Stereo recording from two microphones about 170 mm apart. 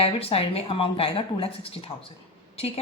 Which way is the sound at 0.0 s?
35° left (ahead or behind).